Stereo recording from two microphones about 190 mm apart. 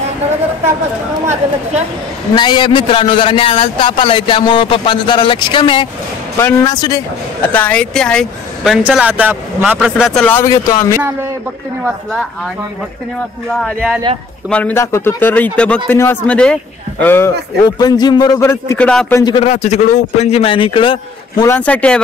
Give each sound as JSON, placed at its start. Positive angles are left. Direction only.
{"t": 2.3, "sound": "a man's voice", "side_deg": 25}
{"t": 7.5, "sound": "speech", "side_deg": 5}
{"t": 8.8, "sound": "a man's voice", "side_deg": -5}
{"t": 14.5, "sound": "a man's voice", "side_deg": 10}
{"t": 19.2, "sound": "a man's voice", "side_deg": 25}
{"t": 19.5, "sound": "a man's voice", "side_deg": 35}
{"t": 21.5, "sound": "a man's voice", "side_deg": 10}